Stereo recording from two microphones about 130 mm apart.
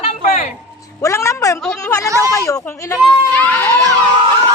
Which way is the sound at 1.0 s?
25° left (ahead or behind).